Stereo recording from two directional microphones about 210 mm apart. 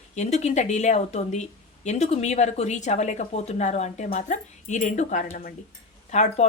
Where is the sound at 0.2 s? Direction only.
30° left (ahead or behind).